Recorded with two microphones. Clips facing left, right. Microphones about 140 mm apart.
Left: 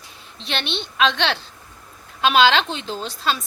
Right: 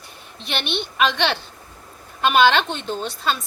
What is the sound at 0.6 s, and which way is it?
Speech, 60° right (ahead or behind).